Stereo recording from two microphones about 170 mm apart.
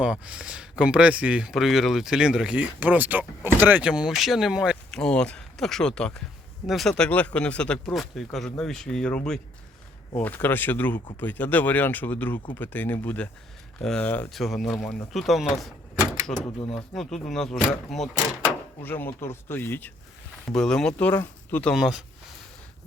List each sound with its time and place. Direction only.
0.0 s speech: 5° right (ahead or behind)
15.6 s door: 5° right (ahead or behind)
16.3 s speech: 30° left (ahead or behind)
16.7 s speech: 5° left (ahead or behind)